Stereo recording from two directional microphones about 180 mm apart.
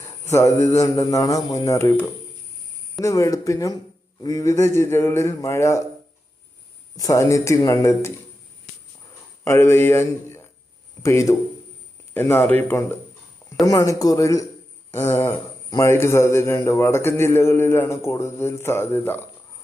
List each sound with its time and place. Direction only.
0.3 s a man's voice: 15° left (ahead or behind)
6.9 s a man's voice: 20° left (ahead or behind)
9.4 s a man's voice: 15° left (ahead or behind)